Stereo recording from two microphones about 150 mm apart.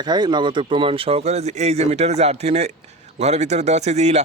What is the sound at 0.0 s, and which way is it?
A man's voice, 30° right (ahead or behind).